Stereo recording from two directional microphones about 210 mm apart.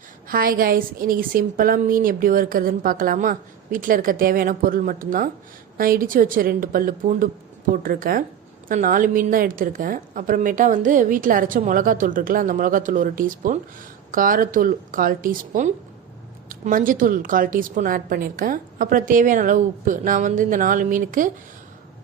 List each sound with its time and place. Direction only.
0.3 s a woman's voice: 45° right (ahead or behind)